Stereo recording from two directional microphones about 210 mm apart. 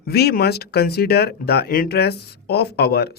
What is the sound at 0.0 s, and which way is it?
Speech, 50° left (ahead or behind).